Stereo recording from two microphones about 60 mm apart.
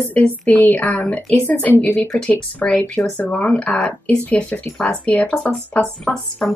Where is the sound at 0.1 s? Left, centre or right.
Left.